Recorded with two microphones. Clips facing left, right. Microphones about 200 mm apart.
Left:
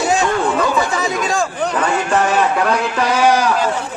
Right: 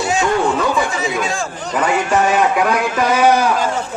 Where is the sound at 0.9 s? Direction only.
40° left (ahead or behind).